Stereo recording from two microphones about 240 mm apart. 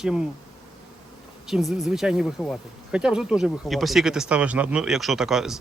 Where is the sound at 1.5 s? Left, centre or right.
Centre.